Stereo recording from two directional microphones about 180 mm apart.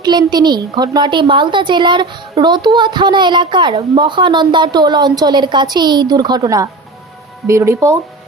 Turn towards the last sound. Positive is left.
turn(degrees=-15)  # may be behind; listen again after turning